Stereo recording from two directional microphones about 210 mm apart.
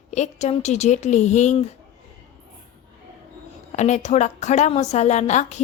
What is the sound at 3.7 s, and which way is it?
A woman's voice, 35° left (ahead or behind).